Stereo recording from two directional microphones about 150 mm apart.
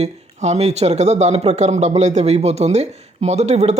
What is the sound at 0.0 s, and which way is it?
Speech, 45° right (ahead or behind).